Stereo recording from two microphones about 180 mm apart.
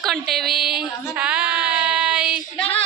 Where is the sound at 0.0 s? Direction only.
Centre (ahead or behind).